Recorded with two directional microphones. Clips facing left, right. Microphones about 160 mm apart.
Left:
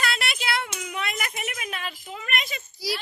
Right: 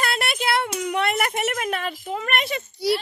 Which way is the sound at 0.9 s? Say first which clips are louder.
Right 10 dB; 65° right (ahead or behind).